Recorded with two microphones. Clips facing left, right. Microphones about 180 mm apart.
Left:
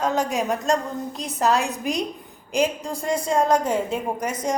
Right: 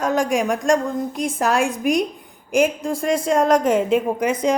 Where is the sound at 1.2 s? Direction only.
50° right (ahead or behind).